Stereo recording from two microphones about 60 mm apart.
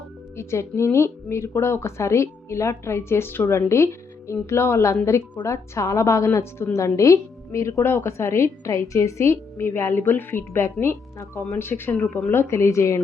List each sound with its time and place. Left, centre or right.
0.3 s a woman's voice: left
6.7 s a woman's voice: left
10.0 s a woman's voice: left
10.3 s a woman's voice: left